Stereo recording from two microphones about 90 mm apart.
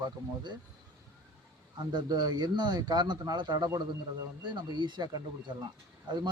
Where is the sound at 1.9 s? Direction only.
50° right (ahead or behind).